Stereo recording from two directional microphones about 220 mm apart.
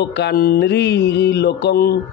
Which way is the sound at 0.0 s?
50° left (ahead or behind).